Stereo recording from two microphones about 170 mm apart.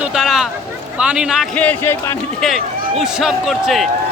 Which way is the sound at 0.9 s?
5° right (ahead or behind).